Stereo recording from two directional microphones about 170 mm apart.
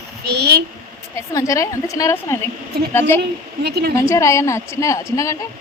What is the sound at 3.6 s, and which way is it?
Speech, 70° right (ahead or behind).